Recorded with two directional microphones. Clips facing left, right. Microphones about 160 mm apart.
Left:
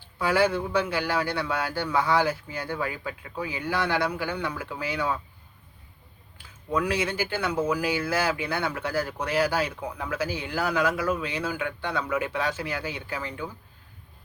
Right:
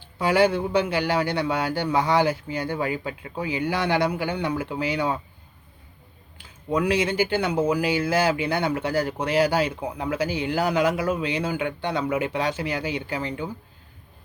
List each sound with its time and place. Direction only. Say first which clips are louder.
0.2 s speech: right 3 dB; 20° right (ahead or behind)
6.3 s speech: right 3 dB; 20° right (ahead or behind)